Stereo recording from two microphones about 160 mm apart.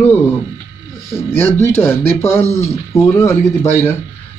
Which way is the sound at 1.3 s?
15° left (ahead or behind).